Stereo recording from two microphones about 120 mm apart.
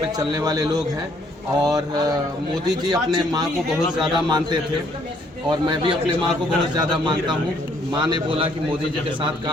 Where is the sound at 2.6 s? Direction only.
35° right (ahead or behind).